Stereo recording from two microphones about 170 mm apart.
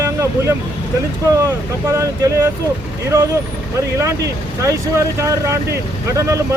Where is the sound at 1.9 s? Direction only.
20° right (ahead or behind).